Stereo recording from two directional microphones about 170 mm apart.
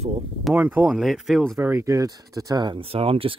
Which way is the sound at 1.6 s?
15° right (ahead or behind).